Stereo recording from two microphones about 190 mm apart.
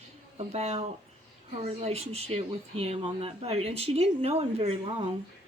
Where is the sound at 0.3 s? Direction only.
35° right (ahead or behind).